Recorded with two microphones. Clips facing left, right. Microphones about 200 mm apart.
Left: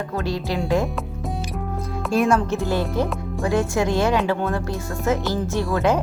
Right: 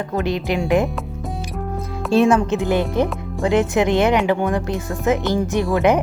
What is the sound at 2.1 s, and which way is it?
Speech, 20° right (ahead or behind).